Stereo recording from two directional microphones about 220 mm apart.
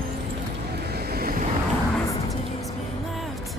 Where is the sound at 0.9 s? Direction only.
45° right (ahead or behind).